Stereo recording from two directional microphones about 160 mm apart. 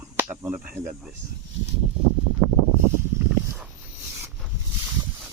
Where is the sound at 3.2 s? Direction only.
10° right (ahead or behind).